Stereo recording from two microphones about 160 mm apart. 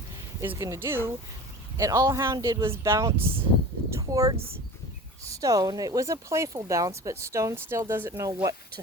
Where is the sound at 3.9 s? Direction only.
20° right (ahead or behind).